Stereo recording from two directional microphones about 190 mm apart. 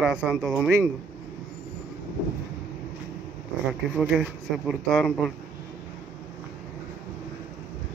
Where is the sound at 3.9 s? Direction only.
Centre (ahead or behind).